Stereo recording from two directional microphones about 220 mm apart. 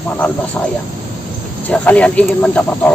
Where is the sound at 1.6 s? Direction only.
5° left (ahead or behind).